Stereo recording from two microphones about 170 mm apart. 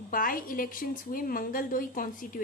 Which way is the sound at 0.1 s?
55° left (ahead or behind).